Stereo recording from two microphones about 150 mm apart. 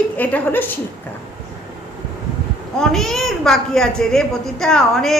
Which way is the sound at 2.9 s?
Centre (ahead or behind).